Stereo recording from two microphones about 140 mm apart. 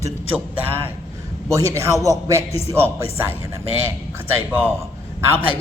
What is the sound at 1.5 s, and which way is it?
A man's voice, 20° right (ahead or behind).